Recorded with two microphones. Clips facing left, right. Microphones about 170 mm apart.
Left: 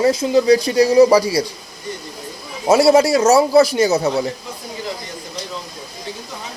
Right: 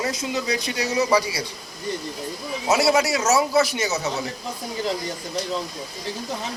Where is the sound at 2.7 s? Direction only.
30° left (ahead or behind).